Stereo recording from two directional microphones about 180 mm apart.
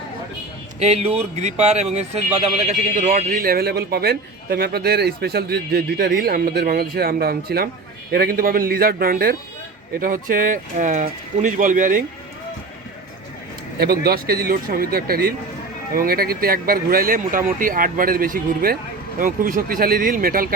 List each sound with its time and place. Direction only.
0.8 s a man's voice: 35° right (ahead or behind)
14.0 s a man's voice: 60° right (ahead or behind)